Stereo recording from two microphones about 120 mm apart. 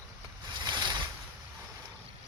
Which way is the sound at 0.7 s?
40° right (ahead or behind).